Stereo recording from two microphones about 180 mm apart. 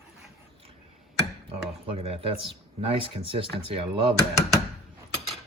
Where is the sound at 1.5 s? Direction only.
30° right (ahead or behind).